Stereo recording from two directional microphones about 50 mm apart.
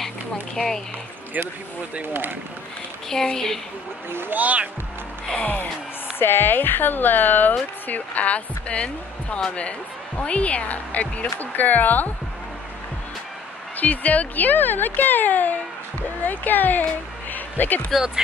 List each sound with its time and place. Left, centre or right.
3.1 s a woman's voice: centre
4.1 s speech: right
4.4 s speech: right
5.3 s speech: left
6.1 s speech: left
13.7 s speech: left
17.3 s insect: left
17.9 s speech: centre